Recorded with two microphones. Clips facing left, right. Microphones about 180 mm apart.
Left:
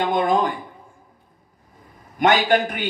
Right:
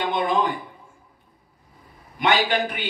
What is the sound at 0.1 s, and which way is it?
Speech, 45° left (ahead or behind).